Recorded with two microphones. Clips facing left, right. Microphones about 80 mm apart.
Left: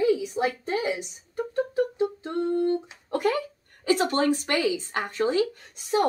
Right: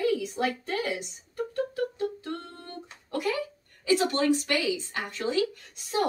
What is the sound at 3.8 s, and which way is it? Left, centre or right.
Speech, left.